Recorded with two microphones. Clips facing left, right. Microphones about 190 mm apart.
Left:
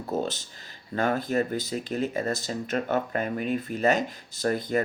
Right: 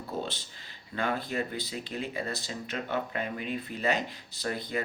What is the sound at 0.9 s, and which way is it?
Speech, 45° left (ahead or behind).